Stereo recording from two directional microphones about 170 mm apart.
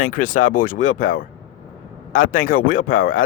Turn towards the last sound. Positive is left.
turn(degrees=50)  # may be behind; listen again after turning